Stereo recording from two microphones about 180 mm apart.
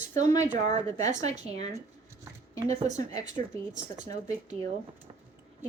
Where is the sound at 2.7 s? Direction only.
40° right (ahead or behind).